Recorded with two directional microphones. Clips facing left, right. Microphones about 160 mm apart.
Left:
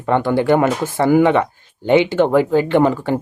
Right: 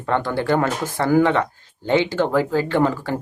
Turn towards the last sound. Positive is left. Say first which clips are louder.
# left 5 dB
turn(degrees=20)  # may be behind; listen again after turning